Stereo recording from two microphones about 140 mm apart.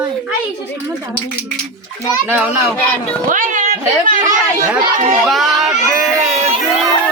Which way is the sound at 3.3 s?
70° right (ahead or behind).